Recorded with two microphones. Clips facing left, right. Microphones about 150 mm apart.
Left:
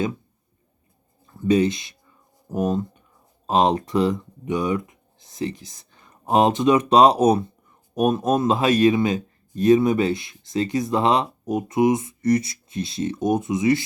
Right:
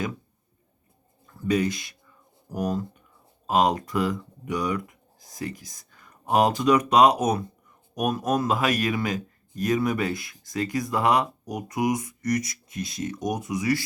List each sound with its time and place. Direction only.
1.3 s speech: 25° left (ahead or behind)